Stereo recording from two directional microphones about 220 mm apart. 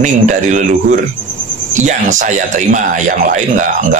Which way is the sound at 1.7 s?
35° right (ahead or behind).